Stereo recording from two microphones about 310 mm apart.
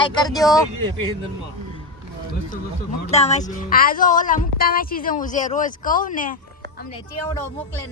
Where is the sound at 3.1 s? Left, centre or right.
Left.